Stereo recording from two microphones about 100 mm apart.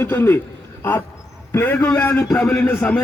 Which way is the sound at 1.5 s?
25° left (ahead or behind).